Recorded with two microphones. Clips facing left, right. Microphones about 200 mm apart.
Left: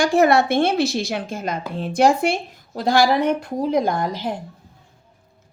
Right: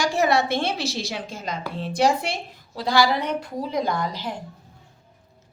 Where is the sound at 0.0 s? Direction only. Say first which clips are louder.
Left 5 dB; 55° left (ahead or behind).